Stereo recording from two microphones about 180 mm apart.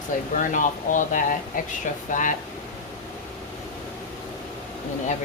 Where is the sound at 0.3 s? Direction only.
45° left (ahead or behind).